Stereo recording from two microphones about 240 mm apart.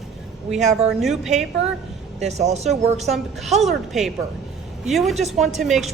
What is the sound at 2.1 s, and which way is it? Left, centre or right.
Speech, right.